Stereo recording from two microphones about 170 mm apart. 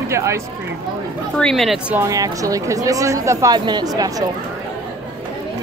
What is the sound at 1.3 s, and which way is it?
Speech, centre (ahead or behind).